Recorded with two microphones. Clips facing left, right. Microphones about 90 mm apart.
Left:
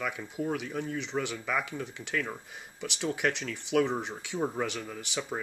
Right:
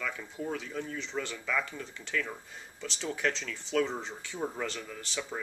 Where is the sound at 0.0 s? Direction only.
15° left (ahead or behind).